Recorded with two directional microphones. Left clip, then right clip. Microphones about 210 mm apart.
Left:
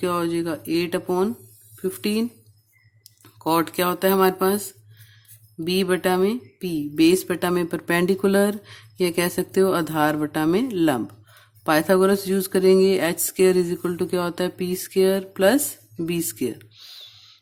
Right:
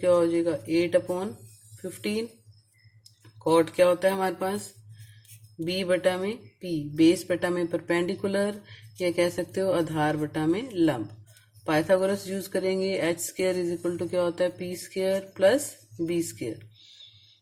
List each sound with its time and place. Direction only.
0.0 s speech: 50° left (ahead or behind)
5.6 s speech: 50° left (ahead or behind)